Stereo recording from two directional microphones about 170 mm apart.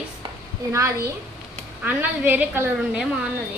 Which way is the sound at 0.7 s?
15° right (ahead or behind).